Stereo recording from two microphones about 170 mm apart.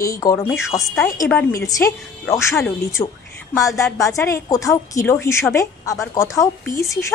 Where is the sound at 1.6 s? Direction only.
20° left (ahead or behind).